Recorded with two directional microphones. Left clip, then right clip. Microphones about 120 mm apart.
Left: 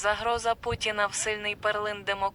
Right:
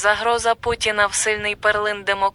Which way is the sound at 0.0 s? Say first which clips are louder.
Right 9 dB; 30° right (ahead or behind).